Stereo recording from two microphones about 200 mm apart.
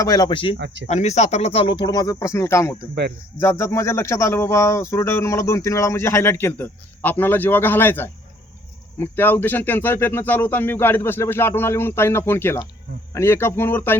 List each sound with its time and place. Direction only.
0.0 s speech: 20° left (ahead or behind)
0.5 s speech: 65° right (ahead or behind)
0.9 s speech: 35° left (ahead or behind); by 13.9 s 10° left (ahead or behind)